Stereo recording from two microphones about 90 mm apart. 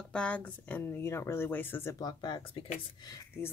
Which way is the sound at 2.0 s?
50° left (ahead or behind).